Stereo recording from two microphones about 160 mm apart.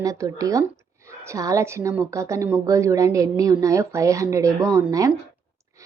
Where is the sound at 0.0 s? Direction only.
20° right (ahead or behind).